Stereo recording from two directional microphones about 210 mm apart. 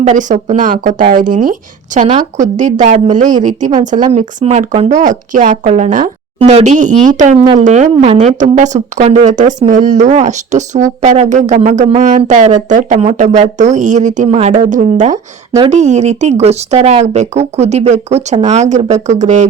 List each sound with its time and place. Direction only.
0.0 s a woman's voice: 35° right (ahead or behind)